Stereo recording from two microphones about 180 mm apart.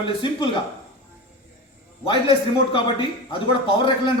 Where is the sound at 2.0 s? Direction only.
30° left (ahead or behind).